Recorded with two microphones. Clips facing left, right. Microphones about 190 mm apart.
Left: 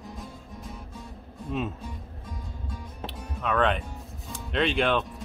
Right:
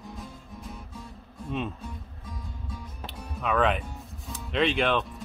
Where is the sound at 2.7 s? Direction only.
Centre (ahead or behind).